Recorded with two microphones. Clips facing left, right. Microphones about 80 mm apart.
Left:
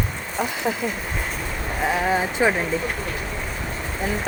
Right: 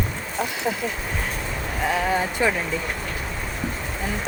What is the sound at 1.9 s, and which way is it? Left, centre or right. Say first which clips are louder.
Speech: left 1 dB; centre.